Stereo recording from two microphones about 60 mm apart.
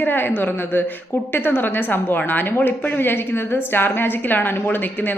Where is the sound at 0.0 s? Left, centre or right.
Left.